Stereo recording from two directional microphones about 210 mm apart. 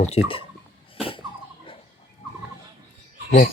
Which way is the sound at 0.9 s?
25° left (ahead or behind).